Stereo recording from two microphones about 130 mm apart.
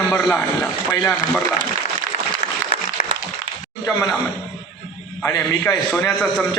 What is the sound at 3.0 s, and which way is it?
Applause, 90° left.